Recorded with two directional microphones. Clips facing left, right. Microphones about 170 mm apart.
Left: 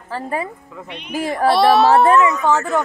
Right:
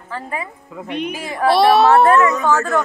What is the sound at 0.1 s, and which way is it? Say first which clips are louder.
Speech: left 3 dB; 35° left (ahead or behind).